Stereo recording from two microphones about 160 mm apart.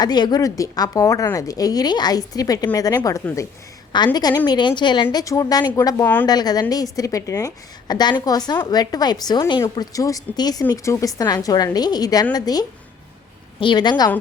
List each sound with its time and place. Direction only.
0.0 s a woman's voice: 25° left (ahead or behind)